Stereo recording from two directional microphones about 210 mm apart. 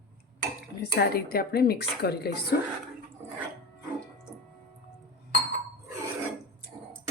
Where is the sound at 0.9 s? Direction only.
50° left (ahead or behind).